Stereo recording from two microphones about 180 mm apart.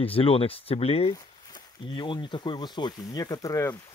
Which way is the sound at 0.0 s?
30° left (ahead or behind).